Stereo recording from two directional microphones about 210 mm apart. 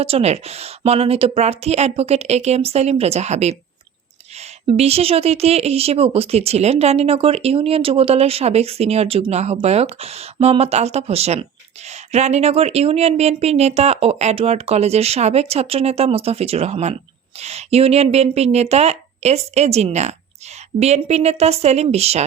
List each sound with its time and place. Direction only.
0.0 s a woman's voice: 30° right (ahead or behind)